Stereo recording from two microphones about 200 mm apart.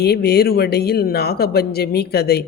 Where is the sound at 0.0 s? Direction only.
55° left (ahead or behind).